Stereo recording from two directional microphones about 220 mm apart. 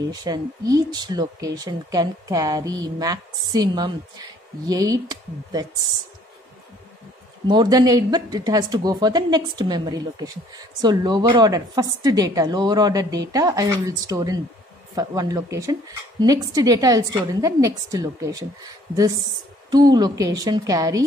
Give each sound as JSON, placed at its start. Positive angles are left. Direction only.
{"t": 0.1, "sound": "speech", "side_deg": -15}
{"t": 7.4, "sound": "speech", "side_deg": -20}